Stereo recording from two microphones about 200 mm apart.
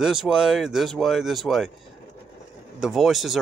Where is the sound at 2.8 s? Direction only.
Centre (ahead or behind).